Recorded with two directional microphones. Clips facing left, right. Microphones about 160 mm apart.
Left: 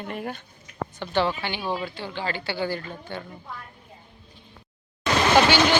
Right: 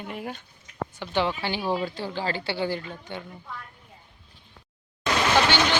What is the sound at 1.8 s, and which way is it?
A woman's voice, 40° right (ahead or behind).